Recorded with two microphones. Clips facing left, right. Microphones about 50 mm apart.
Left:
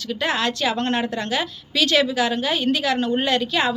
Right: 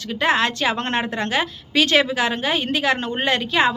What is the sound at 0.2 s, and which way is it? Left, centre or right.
Speech, right.